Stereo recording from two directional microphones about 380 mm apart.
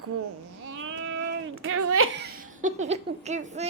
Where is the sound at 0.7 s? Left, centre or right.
Right.